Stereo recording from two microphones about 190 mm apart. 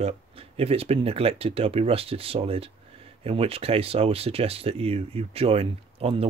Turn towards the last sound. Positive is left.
turn(degrees=-30)  # may be behind; listen again after turning